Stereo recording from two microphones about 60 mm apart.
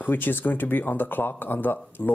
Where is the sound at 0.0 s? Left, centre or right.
Left.